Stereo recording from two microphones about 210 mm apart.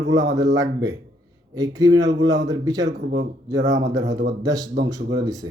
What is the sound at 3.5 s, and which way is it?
Speech, 55° right (ahead or behind).